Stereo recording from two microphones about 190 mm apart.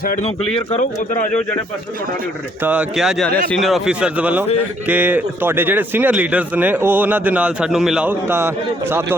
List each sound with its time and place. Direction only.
0.2 s speech: 35° left (ahead or behind)
2.6 s a man's voice: 5° right (ahead or behind)